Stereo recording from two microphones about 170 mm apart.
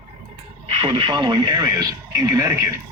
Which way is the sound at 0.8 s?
30° right (ahead or behind).